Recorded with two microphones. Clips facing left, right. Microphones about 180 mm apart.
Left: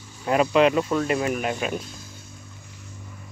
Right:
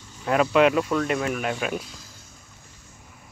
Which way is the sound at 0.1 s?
10° left (ahead or behind).